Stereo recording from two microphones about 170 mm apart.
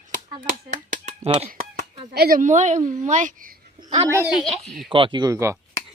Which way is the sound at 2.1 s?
60° right (ahead or behind).